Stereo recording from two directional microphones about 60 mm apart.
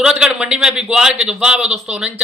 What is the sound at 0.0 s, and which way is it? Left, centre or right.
A man's voice, centre.